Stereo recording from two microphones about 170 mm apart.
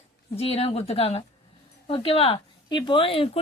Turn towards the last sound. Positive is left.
turn(degrees=30)  # may be behind; listen again after turning